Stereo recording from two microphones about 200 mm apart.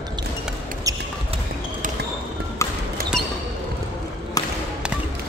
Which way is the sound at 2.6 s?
15° left (ahead or behind).